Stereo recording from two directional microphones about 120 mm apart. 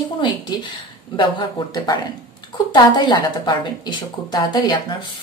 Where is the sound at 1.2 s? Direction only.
40° left (ahead or behind).